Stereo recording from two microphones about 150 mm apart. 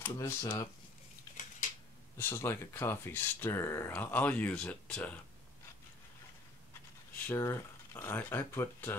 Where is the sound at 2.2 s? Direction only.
15° left (ahead or behind).